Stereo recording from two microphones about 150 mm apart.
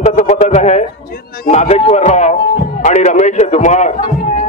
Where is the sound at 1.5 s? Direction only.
45° left (ahead or behind).